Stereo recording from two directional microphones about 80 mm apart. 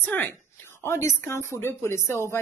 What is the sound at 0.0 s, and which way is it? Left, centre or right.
A woman's voice, left.